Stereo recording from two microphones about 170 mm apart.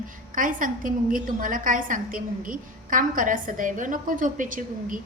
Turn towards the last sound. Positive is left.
turn(degrees=-50)  # may be behind; listen again after turning